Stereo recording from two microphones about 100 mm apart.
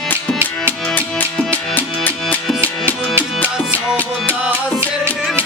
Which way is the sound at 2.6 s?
25° right (ahead or behind).